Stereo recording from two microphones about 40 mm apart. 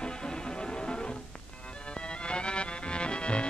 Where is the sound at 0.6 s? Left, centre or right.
Centre.